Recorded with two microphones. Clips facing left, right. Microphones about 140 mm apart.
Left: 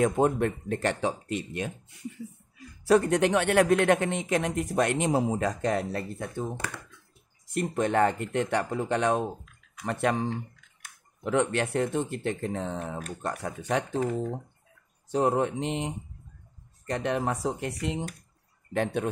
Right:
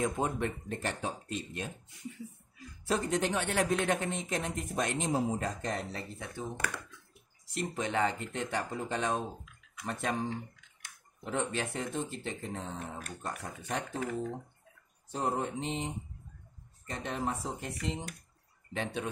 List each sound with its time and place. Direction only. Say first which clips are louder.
0.0 s speech: left 8 dB; 55° left (ahead or behind); by 1.7 s 75° left (ahead or behind)
2.9 s speech: left 9 dB; 65° left (ahead or behind)
7.4 s speech: left 8 dB; 50° left (ahead or behind)
11.2 s speech: left 8 dB; 70° left (ahead or behind)
13.4 s speech: left 10 dB; 80° left
15.0 s speech: left 8 dB; 75° left (ahead or behind)
18.7 s speech: left 8 dB; 55° left (ahead or behind)